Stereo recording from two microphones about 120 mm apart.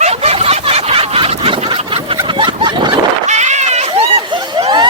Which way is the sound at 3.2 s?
75° right (ahead or behind).